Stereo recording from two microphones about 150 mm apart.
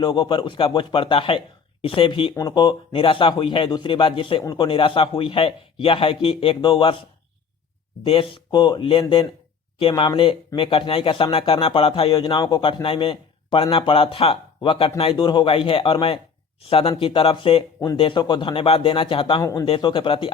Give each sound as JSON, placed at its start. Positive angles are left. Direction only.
{"t": 0.0, "sound": "speech", "side_deg": 35}
{"t": 8.0, "sound": "speech", "side_deg": 35}